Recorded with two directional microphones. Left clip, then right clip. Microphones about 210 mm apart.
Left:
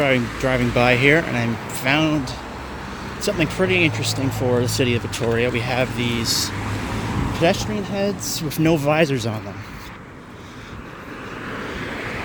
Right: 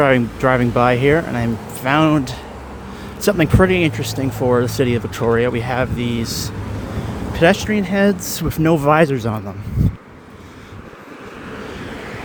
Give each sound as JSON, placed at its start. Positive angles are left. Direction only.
{"t": 0.0, "sound": "speech", "side_deg": -20}
{"t": 2.0, "sound": "speech", "side_deg": -35}
{"t": 8.5, "sound": "speech", "side_deg": -25}
{"t": 11.9, "sound": "vehicle", "side_deg": -40}